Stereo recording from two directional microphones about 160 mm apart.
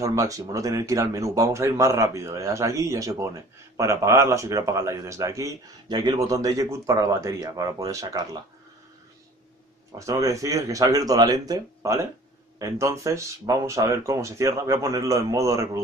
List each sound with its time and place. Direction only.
0.0 s speech: 20° right (ahead or behind)
9.9 s speech: 20° right (ahead or behind)